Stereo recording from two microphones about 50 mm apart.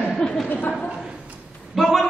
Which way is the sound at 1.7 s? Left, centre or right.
Centre.